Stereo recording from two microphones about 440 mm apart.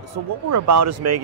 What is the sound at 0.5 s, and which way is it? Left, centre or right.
Speech, right.